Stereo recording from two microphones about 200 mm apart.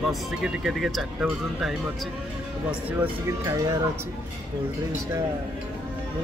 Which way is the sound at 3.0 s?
15° right (ahead or behind).